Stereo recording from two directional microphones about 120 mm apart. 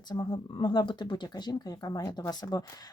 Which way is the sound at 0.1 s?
35° left (ahead or behind).